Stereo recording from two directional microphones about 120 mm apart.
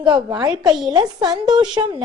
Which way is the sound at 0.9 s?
35° right (ahead or behind).